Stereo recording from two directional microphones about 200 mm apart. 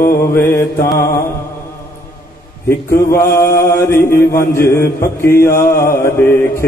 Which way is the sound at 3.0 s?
15° left (ahead or behind).